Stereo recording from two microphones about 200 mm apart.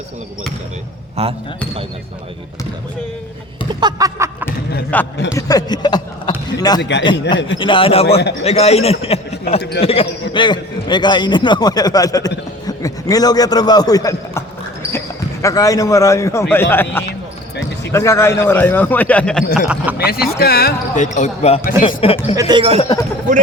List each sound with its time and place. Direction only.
1.2 s a man's voice: 30° right (ahead or behind)
3.8 s a sound: 20° right (ahead or behind)
4.9 s a man's voice: 10° left (ahead or behind); by 7.3 s 25° left (ahead or behind)
7.3 s speech: 65° left (ahead or behind)
7.6 s speech: 25° left (ahead or behind)
9.6 s speech: 55° left (ahead or behind)
9.8 s a man's voice: 30° left (ahead or behind); by 19.5 s 5° left (ahead or behind)
19.6 s speech: 5° right (ahead or behind)
20.4 s speech: 50° left (ahead or behind); by 22.4 s 30° left (ahead or behind)
22.4 s speech: 20° right (ahead or behind)
22.8 s speech: 20° left (ahead or behind)